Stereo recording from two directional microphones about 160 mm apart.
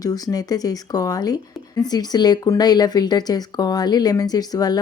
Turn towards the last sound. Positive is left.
turn(degrees=25)  # may be behind; listen again after turning